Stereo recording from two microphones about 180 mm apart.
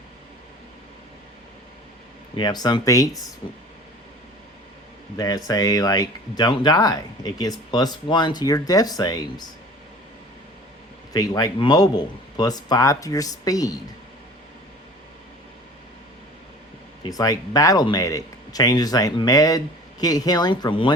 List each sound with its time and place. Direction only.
2.3 s speech: 25° left (ahead or behind)
5.1 s speech: 20° left (ahead or behind)
11.1 s speech: 20° left (ahead or behind)
17.0 s speech: 20° left (ahead or behind)